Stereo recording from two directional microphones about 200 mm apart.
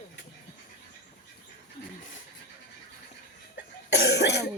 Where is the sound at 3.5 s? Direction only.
60° left (ahead or behind).